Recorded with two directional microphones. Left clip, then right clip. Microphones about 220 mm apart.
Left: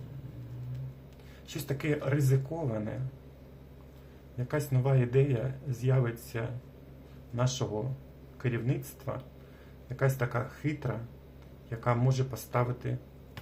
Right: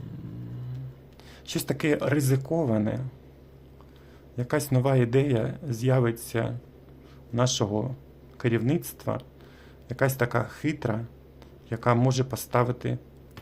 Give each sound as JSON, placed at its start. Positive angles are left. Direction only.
{"t": 1.5, "sound": "speech", "side_deg": -50}
{"t": 4.4, "sound": "speech", "side_deg": -50}